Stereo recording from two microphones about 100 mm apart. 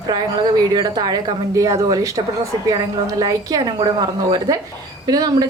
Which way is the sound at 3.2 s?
35° right (ahead or behind).